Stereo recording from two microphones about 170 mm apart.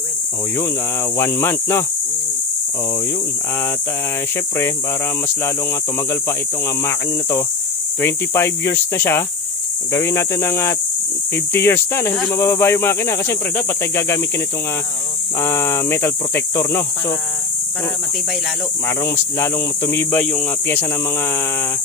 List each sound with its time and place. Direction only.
1.1 s speech: 15° left (ahead or behind)
6.8 s speech: 15° left (ahead or behind)
15.4 s speech: 15° left (ahead or behind)
19.0 s speech: 15° left (ahead or behind)